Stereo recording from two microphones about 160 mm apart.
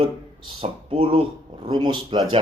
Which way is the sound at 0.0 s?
35° right (ahead or behind).